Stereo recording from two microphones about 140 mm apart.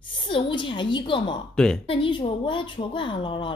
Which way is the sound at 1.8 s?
40° left (ahead or behind).